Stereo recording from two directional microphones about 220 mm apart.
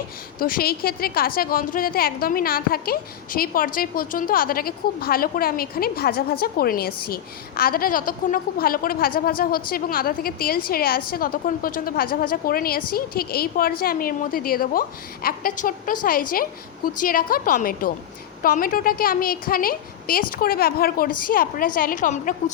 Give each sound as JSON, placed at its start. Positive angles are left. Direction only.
{"t": 0.3, "sound": "a woman's voice", "side_deg": 40}